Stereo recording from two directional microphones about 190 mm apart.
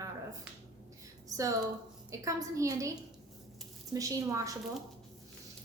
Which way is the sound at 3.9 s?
15° right (ahead or behind).